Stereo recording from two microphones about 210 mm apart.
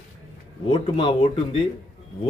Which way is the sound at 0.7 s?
25° left (ahead or behind).